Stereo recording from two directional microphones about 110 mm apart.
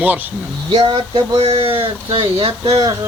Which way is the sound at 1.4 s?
60° right (ahead or behind).